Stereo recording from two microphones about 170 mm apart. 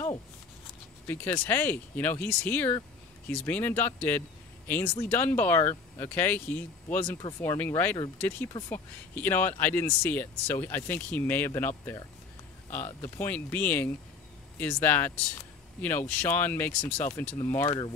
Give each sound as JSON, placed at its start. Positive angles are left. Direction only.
{"t": 1.0, "sound": "speech", "side_deg": 10}
{"t": 13.0, "sound": "speech", "side_deg": 10}